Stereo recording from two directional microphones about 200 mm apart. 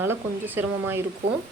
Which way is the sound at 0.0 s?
10° right (ahead or behind).